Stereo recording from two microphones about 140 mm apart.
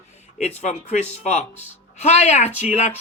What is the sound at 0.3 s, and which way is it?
Speech, 55° left (ahead or behind).